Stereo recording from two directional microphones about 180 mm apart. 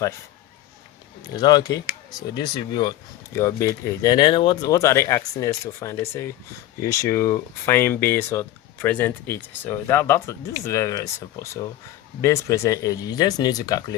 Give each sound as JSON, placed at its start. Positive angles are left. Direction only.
{"t": 1.4, "sound": "speech", "side_deg": 20}